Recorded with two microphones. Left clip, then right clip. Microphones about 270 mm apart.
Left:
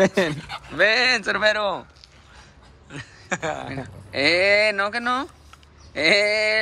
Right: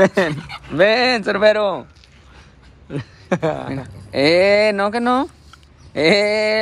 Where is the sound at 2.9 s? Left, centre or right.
Centre.